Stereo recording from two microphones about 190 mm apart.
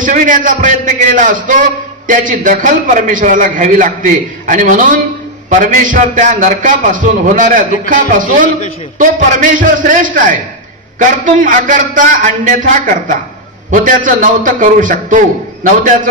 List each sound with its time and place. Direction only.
0.0 s a man's voice: 45° right (ahead or behind)